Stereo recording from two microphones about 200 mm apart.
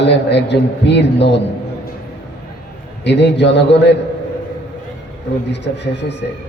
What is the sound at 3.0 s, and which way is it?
Speech, 60° left (ahead or behind).